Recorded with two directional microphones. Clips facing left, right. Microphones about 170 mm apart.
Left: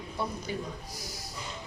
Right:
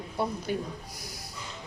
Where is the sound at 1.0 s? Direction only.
60° right (ahead or behind).